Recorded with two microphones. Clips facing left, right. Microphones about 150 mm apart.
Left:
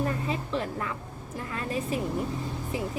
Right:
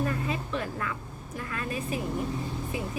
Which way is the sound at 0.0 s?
30° left (ahead or behind).